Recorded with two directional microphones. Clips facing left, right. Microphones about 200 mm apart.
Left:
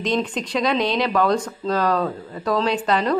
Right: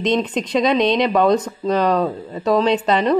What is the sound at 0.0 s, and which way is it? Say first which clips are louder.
Speech: right 4 dB; 20° right (ahead or behind).